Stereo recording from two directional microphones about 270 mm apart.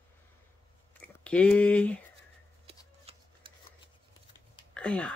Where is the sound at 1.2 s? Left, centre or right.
Centre.